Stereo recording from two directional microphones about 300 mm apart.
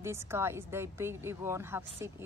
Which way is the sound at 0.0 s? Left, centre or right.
Centre.